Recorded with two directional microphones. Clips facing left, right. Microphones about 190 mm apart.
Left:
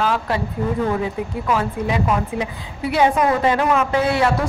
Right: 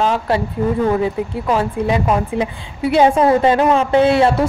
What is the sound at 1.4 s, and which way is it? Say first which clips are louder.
Speech: right 4 dB; 30° right (ahead or behind).